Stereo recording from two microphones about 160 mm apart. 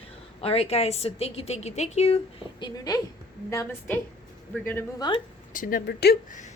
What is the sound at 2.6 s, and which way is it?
A woman's voice, 25° left (ahead or behind).